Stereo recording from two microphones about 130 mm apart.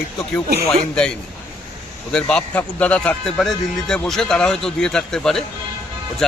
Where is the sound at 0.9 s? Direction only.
5° left (ahead or behind).